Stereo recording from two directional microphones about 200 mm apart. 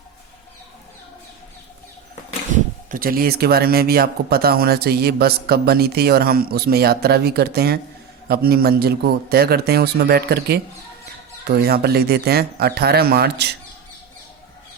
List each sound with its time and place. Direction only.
2.9 s speech: 45° right (ahead or behind)